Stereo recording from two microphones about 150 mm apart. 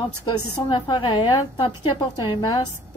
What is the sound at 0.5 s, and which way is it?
A woman's voice, 30° left (ahead or behind).